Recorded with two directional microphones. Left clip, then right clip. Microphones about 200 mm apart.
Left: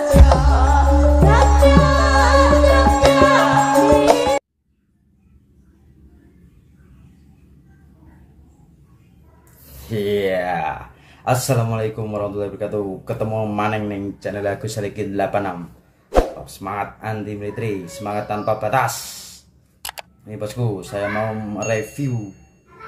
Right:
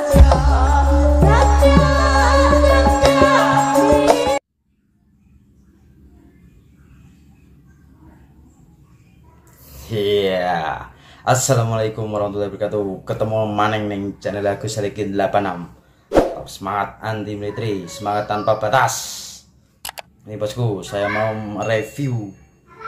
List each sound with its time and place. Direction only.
0.0 s music: centre (ahead or behind)
9.7 s speech: centre (ahead or behind)